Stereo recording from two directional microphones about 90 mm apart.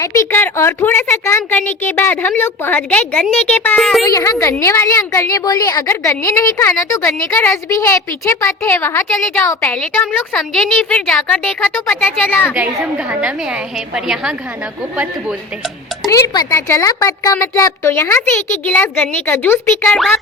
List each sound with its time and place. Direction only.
0.0 s a woman's voice: 35° left (ahead or behind)
0.3 s speech: 20° left (ahead or behind)
3.8 s a woman's voice: centre (ahead or behind)
4.0 s a woman's voice: 40° left (ahead or behind)
5.5 s a woman's voice: 45° left (ahead or behind); by 9.0 s 25° left (ahead or behind)
9.1 s a woman's voice: 5° left (ahead or behind)
9.4 s a woman's voice: 30° left (ahead or behind)
9.6 s speech: 20° left (ahead or behind)
10.3 s a woman's voice: 5° left (ahead or behind)
12.3 s speech: 20° left (ahead or behind)
12.5 s a woman's voice: 15° right (ahead or behind)
16.0 s a woman's voice: 45° left (ahead or behind)
16.6 s a woman's voice: 35° left (ahead or behind)
17.8 s speech: 30° left (ahead or behind)